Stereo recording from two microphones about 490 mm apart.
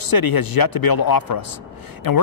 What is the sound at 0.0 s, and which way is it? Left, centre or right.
A man's voice, left.